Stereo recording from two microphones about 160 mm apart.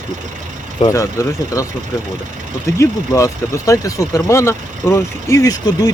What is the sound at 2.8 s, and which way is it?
Speech, 20° left (ahead or behind).